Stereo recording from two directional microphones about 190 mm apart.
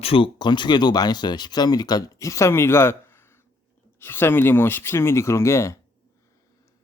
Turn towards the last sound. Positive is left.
turn(degrees=15)  # may be behind; listen again after turning